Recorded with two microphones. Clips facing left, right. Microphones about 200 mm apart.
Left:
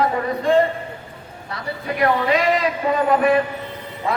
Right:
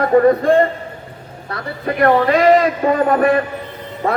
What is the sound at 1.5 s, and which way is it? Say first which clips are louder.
A man's voice: right 4 dB; 50° right (ahead or behind).